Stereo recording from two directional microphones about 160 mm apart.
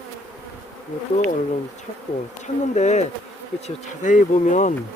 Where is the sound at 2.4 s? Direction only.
45° left (ahead or behind).